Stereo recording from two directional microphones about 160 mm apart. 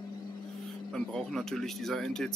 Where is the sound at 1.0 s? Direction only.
5° left (ahead or behind).